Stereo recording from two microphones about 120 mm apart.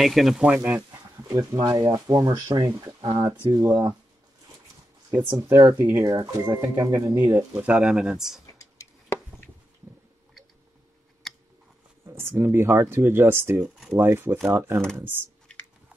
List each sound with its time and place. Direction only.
0.0 s speech: centre (ahead or behind); by 0.8 s 15° right (ahead or behind)
1.5 s speech: 30° right (ahead or behind)
5.1 s speech: 15° right (ahead or behind)
5.6 s speech: 25° right (ahead or behind)
7.5 s speech: 10° right (ahead or behind)
8.5 s a sound: 25° left (ahead or behind)
12.1 s speech: 20° right (ahead or behind)
13.6 s speech: centre (ahead or behind)
13.9 s speech: 20° right (ahead or behind)